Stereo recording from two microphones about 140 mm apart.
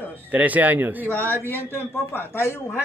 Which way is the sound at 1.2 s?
15° left (ahead or behind).